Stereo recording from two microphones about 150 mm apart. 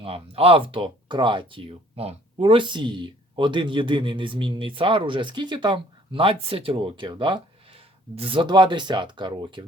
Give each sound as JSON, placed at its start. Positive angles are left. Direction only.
{"t": 0.0, "sound": "speech", "side_deg": -40}